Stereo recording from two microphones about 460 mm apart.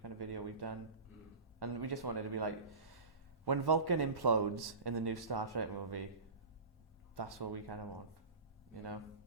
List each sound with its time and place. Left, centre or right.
0.0 s a sound: right
1.5 s a man's voice: right
7.2 s a man's voice: right